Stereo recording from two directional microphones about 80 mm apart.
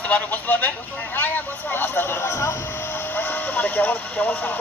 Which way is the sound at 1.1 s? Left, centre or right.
Left.